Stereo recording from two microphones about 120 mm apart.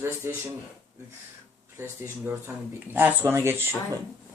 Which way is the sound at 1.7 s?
20° right (ahead or behind).